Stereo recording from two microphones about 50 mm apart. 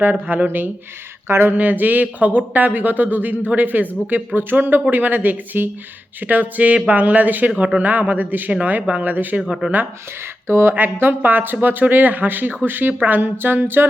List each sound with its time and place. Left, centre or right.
0.0 s speech: right
1.3 s speech: right
1.5 s speech: right
9.5 s speech: centre
10.4 s speech: right
11.2 s speech: right